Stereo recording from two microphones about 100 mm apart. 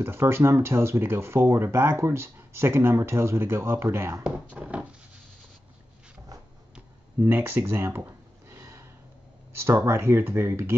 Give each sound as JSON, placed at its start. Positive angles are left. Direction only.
{"t": 0.0, "sound": "speech", "side_deg": -25}
{"t": 4.2, "sound": "speech", "side_deg": -10}
{"t": 6.7, "sound": "a sound", "side_deg": -15}
{"t": 9.5, "sound": "speech", "side_deg": -25}